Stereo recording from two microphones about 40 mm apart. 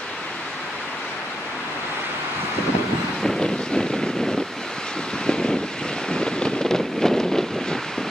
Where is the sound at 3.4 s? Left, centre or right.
Centre.